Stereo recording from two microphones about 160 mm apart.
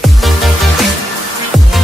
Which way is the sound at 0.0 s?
Centre (ahead or behind).